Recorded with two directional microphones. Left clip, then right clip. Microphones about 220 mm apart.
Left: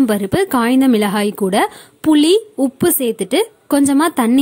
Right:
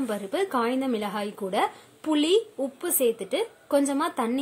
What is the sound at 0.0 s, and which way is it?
A woman's voice, 45° left (ahead or behind).